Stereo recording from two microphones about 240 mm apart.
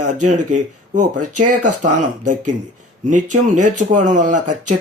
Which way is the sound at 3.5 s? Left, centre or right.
Right.